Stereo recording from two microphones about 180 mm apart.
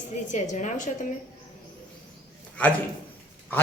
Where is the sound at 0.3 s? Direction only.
40° left (ahead or behind).